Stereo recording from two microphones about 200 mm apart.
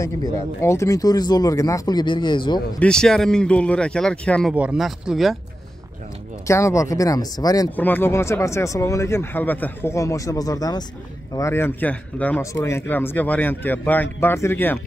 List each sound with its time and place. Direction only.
0.0 s speech: 15° left (ahead or behind)
2.8 s speech: 5° left (ahead or behind)
6.4 s speech: 15° left (ahead or behind)